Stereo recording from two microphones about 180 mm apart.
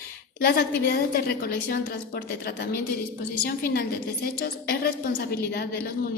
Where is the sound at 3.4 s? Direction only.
60° left (ahead or behind).